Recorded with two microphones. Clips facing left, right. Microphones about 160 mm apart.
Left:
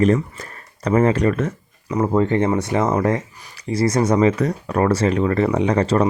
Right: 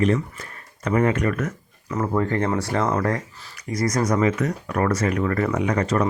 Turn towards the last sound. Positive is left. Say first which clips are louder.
# left 4 dB
turn(degrees=30)  # may be behind; listen again after turning